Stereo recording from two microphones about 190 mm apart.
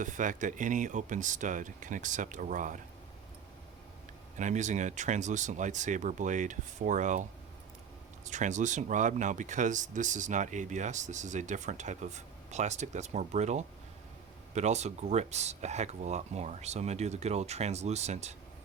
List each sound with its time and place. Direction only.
0.0 s speech: 45° right (ahead or behind)
4.4 s speech: 40° right (ahead or behind)